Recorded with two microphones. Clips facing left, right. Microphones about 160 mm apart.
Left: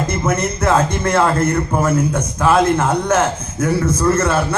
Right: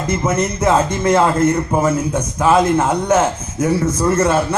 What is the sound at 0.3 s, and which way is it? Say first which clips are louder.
A man's voice: right 1 dB; 20° right (ahead or behind).